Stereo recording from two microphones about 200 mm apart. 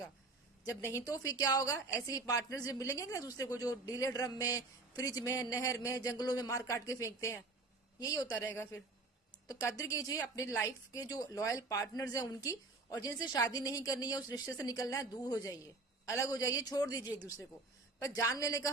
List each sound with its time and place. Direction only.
0.6 s a woman's voice: 15° left (ahead or behind)